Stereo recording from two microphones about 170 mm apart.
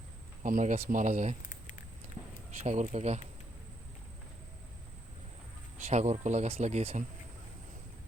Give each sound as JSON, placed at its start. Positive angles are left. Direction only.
{"t": 0.4, "sound": "speech", "side_deg": -50}
{"t": 1.4, "sound": "a sound", "side_deg": 50}
{"t": 2.6, "sound": "speech", "side_deg": -45}
{"t": 5.7, "sound": "speech", "side_deg": -40}